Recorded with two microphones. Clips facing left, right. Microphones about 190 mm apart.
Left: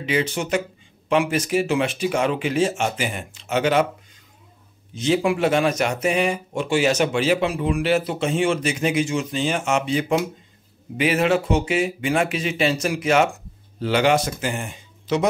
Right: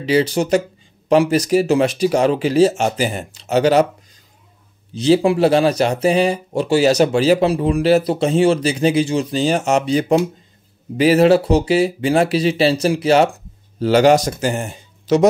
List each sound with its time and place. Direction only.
0.0 s speech: 35° right (ahead or behind)
4.9 s speech: 35° right (ahead or behind)